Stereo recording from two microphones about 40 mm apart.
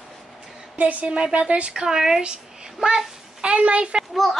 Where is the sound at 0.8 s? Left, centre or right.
Right.